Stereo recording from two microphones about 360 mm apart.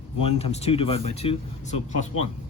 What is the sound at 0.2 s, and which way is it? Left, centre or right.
Speech, centre.